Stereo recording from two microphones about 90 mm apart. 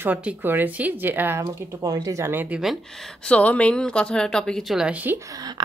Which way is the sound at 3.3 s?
15° left (ahead or behind).